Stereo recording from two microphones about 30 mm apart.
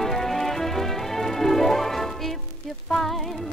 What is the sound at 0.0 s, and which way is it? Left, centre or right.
Music, centre.